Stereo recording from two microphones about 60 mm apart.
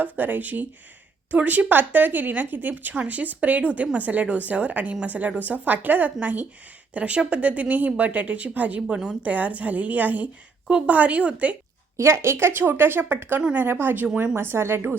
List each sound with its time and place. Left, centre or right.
0.0 s a woman's voice: right
11.9 s a woman's voice: right
14.3 s a woman's voice: right